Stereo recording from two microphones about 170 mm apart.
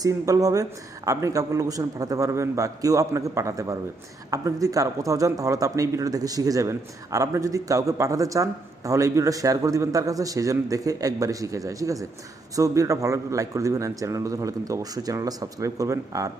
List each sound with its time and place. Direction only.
0.0 s a man's voice: 20° right (ahead or behind)